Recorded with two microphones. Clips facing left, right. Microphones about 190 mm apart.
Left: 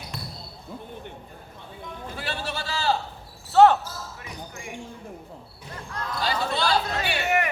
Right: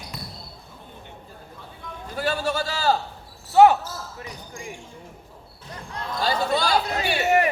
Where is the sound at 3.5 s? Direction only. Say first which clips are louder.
Right 1 dB; 10° right (ahead or behind).